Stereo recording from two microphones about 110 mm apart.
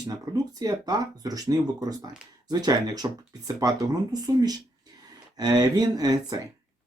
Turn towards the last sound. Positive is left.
turn(degrees=-35)  # may be behind; listen again after turning